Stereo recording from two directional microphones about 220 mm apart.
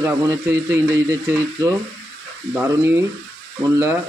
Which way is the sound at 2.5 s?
10° right (ahead or behind).